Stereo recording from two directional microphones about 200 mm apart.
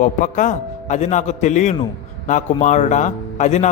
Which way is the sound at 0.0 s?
40° left (ahead or behind).